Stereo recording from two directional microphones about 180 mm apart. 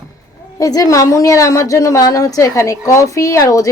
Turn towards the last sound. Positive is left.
turn(degrees=20)  # may be behind; listen again after turning